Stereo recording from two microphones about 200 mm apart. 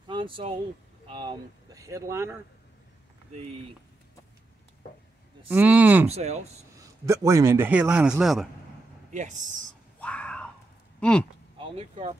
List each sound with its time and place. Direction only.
0.0 s a sound: 25° right (ahead or behind)
1.0 s speech: 25° right (ahead or behind)
5.5 s a man's voice: 10° right (ahead or behind)
6.0 s speech: 35° right (ahead or behind)
6.8 s a man's voice: 15° right (ahead or behind)
9.1 s speech: 40° right (ahead or behind)
9.9 s whispering: 5° left (ahead or behind)
11.0 s speech: 5° left (ahead or behind)
11.5 s speech: 30° right (ahead or behind)